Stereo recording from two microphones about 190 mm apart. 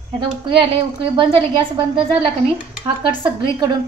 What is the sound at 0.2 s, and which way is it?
A woman's voice, 25° right (ahead or behind).